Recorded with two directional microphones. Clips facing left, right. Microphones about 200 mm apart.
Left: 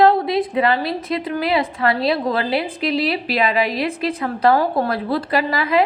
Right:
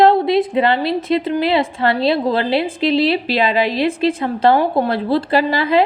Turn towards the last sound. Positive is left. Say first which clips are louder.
# right 3 dB
turn(degrees=-30)  # may be behind; listen again after turning